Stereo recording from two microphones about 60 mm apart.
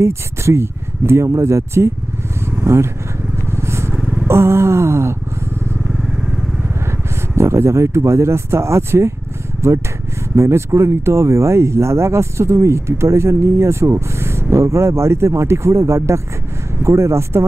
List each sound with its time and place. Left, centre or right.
0.0 s speech: right
3.5 s vehicle: right
4.0 s vehicle: centre
4.3 s speech: right
7.3 s speech: right
10.3 s speech: right